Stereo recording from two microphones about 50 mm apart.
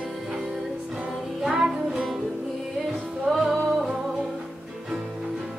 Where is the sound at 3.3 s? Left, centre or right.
Centre.